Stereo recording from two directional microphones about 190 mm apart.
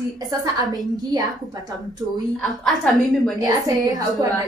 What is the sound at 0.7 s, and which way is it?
A woman's voice, 20° right (ahead or behind).